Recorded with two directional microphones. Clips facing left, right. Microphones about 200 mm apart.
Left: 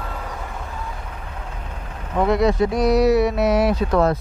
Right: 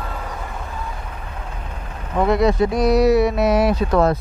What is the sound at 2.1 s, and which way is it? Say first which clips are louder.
Speech: right 1 dB; 20° right (ahead or behind).